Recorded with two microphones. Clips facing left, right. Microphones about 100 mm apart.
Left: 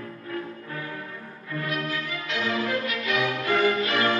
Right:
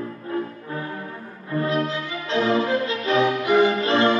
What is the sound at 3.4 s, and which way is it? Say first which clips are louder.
Music: right 5 dB; 20° right (ahead or behind).